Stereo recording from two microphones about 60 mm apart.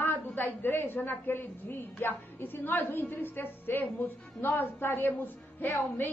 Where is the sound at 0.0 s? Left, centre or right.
Left.